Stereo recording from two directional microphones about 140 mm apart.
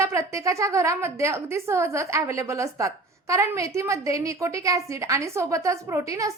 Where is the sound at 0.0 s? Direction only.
20° right (ahead or behind).